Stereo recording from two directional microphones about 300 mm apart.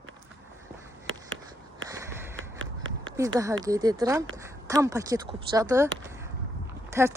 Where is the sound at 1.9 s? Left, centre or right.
Centre.